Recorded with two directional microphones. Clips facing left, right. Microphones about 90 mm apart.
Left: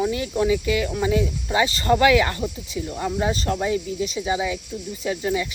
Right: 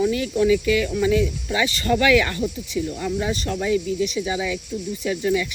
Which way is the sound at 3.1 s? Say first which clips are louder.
Left 4 dB; 35° left (ahead or behind).